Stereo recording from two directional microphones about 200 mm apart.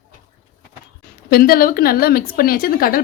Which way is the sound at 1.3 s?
45° left (ahead or behind).